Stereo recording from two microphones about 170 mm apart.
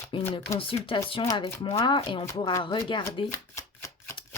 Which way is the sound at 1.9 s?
30° left (ahead or behind).